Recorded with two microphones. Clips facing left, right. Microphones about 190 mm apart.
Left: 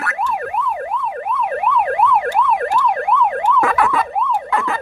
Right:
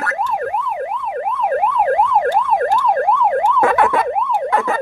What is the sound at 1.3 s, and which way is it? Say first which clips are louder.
Emergency vehicle: right 2 dB; 25° right (ahead or behind).